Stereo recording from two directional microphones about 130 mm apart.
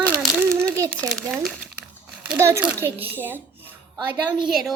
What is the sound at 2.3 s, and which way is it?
A child's voice, 25° right (ahead or behind).